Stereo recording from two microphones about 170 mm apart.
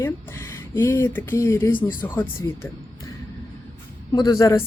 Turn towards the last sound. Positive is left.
turn(degrees=15)  # may be behind; listen again after turning